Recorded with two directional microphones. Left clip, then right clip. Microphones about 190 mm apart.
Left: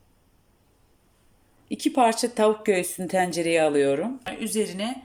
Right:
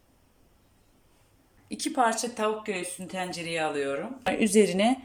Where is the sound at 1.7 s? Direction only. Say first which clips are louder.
Left 4 dB; 20° left (ahead or behind).